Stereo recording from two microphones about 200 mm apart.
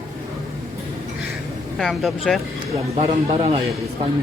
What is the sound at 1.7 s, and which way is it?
Speech, centre (ahead or behind).